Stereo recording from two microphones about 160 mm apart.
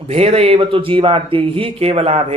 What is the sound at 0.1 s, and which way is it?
Speech, 40° right (ahead or behind).